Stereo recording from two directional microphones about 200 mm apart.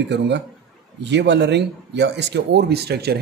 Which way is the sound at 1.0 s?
60° right (ahead or behind).